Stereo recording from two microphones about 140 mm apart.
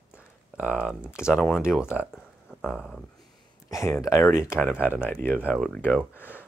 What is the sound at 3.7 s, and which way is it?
Speech, 20° left (ahead or behind).